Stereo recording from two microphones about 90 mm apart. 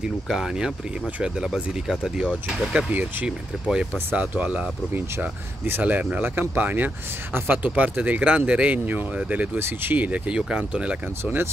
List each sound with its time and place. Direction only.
0.3 s speech: 5° right (ahead or behind)
2.9 s speech: 15° right (ahead or behind)